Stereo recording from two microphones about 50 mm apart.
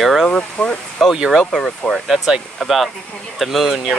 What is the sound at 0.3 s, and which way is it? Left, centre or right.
Speech, left.